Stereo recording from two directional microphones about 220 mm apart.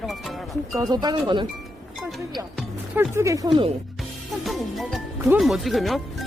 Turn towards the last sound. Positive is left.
turn(degrees=0)  # may be behind; listen again after turning